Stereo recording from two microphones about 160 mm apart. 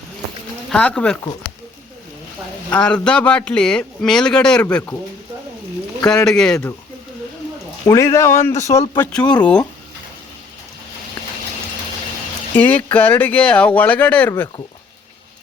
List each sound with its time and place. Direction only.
0.7 s a man's voice: 5° left (ahead or behind)
2.6 s a man's voice: 5° left (ahead or behind)
6.2 s a man's voice: 5° left (ahead or behind)
7.9 s speech: 20° left (ahead or behind)
12.5 s speech: 10° left (ahead or behind)